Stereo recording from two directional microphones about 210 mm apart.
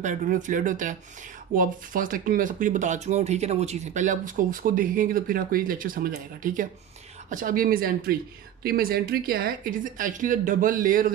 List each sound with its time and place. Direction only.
0.0 s speech: 35° right (ahead or behind)